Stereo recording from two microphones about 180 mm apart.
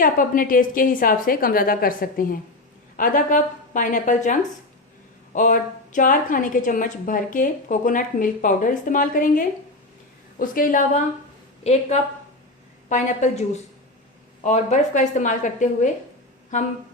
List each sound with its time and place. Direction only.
0.0 s a woman's voice: 50° left (ahead or behind)